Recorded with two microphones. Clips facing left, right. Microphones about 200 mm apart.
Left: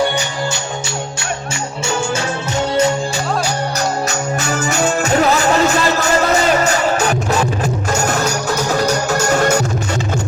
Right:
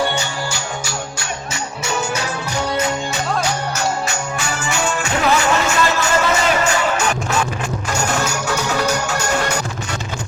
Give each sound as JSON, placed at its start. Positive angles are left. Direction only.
{"t": 3.8, "sound": "music", "side_deg": 40}